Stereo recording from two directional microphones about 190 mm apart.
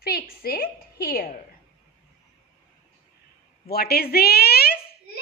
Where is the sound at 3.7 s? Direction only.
55° left (ahead or behind).